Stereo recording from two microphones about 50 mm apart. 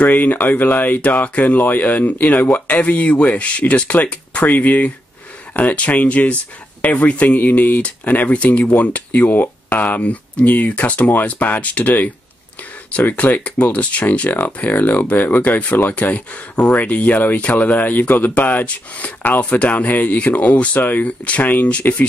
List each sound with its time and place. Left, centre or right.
0.0 s speech: left
13.1 s speech: left
15.9 s speech: left